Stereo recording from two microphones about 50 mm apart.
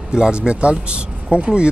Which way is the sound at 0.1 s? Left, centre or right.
Centre.